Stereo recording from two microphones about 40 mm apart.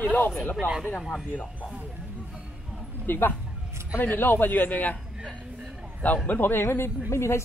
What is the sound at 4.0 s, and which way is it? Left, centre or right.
Speech, left.